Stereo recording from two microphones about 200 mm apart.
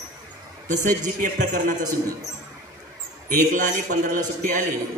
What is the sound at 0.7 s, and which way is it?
Speech, 40° right (ahead or behind).